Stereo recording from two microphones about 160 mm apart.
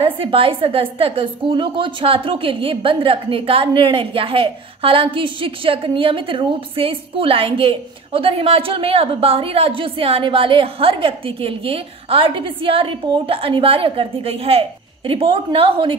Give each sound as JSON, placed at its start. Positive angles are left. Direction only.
{"t": 0.0, "sound": "a woman's voice", "side_deg": -35}